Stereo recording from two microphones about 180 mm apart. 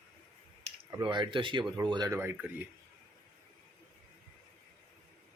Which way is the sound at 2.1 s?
10° right (ahead or behind).